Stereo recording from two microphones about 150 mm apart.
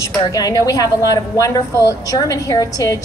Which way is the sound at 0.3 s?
25° left (ahead or behind).